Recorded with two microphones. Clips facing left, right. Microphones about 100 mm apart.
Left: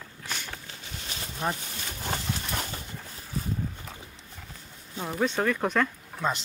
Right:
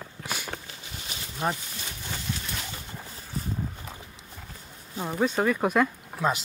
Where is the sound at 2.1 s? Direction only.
55° left (ahead or behind).